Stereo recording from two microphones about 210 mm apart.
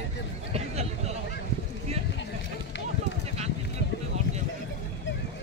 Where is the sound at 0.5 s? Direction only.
30° right (ahead or behind).